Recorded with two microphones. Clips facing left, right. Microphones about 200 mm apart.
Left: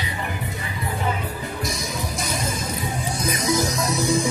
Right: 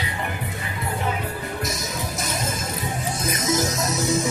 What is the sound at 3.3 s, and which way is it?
Music, 20° right (ahead or behind).